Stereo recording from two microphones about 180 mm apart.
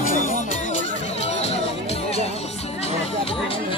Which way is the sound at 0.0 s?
45° left (ahead or behind).